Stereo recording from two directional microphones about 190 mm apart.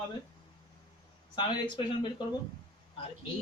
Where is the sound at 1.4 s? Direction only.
25° left (ahead or behind).